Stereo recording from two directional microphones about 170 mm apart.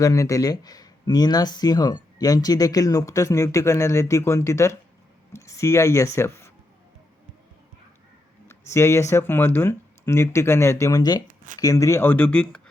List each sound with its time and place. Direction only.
0.0 s speech: 20° left (ahead or behind)
8.4 s speech: 15° left (ahead or behind)